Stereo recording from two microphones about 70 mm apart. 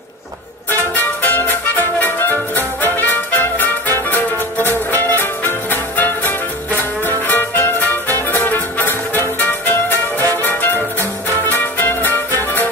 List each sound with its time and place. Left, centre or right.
0.7 s music: left